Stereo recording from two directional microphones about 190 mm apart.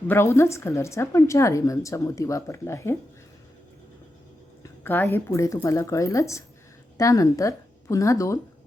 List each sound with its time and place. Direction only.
0.1 s a woman's voice: 15° left (ahead or behind)
4.6 s a woman's voice: 10° left (ahead or behind)